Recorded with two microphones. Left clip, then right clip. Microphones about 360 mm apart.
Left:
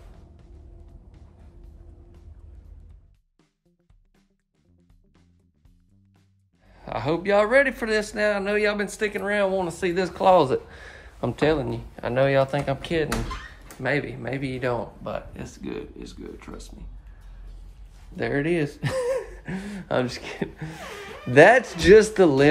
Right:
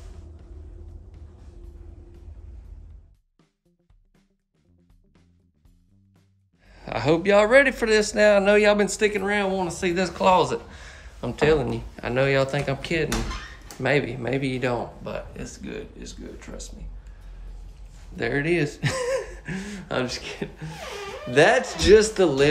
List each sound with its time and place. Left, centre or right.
6.6 s speech: centre
18.1 s speech: centre